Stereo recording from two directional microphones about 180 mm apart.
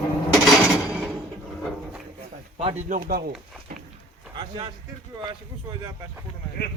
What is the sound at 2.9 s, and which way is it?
Speech, 50° right (ahead or behind).